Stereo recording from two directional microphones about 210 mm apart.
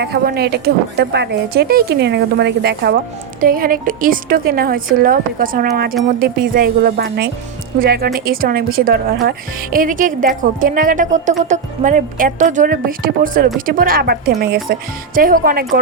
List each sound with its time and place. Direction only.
0.0 s a woman's voice: 50° right (ahead or behind)